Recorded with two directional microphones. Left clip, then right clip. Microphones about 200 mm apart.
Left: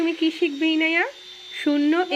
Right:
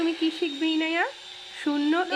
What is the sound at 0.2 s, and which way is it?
Speech, 15° left (ahead or behind).